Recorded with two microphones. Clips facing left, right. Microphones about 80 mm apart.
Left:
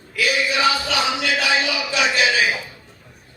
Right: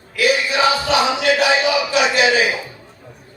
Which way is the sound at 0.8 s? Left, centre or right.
Right.